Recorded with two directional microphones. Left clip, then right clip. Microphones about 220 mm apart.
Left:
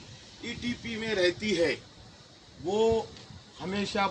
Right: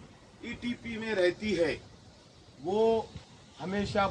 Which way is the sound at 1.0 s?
10° left (ahead or behind).